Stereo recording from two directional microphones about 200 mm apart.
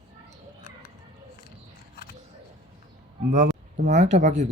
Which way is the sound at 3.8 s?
35° right (ahead or behind).